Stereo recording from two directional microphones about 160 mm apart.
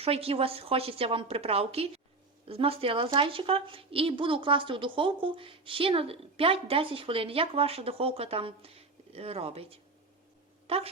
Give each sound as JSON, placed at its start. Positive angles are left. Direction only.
{"t": 0.0, "sound": "a woman's voice", "side_deg": -35}